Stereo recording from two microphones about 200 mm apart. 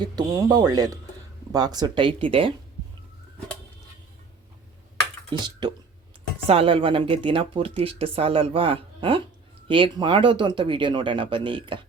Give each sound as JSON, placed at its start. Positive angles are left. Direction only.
{"t": 0.0, "sound": "speech", "side_deg": -20}
{"t": 5.3, "sound": "speech", "side_deg": -20}